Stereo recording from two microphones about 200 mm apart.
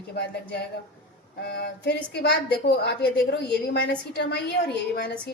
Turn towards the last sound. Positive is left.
turn(degrees=55)  # may be behind; listen again after turning